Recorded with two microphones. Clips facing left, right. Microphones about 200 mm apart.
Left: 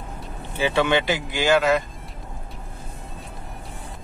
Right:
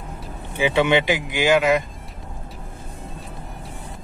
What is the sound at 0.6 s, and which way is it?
Speech, 15° right (ahead or behind).